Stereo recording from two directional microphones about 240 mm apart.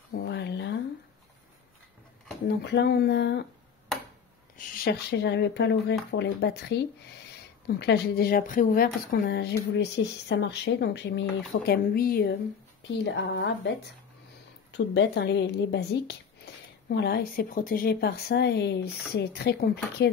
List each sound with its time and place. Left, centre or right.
0.1 s a sound: left
2.4 s speech: left
4.6 s speech: left
15.0 s speech: left